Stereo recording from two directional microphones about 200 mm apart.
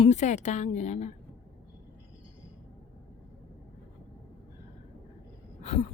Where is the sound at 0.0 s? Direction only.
35° left (ahead or behind).